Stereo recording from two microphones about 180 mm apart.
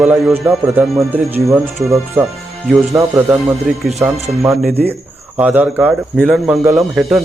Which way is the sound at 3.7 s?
5° right (ahead or behind).